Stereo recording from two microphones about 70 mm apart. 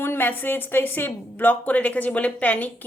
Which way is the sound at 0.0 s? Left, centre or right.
Left.